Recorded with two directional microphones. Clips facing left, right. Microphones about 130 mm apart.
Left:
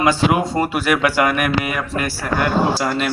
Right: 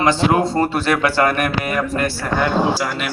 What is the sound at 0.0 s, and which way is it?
Speech, 10° left (ahead or behind).